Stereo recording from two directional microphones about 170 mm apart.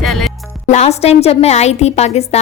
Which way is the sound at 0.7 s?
40° left (ahead or behind).